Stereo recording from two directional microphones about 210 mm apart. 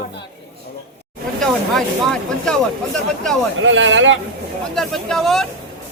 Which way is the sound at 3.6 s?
65° right (ahead or behind).